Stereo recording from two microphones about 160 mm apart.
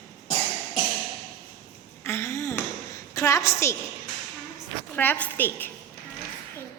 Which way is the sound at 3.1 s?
20° left (ahead or behind).